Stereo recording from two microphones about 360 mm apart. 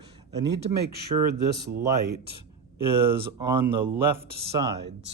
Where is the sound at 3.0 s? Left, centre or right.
Centre.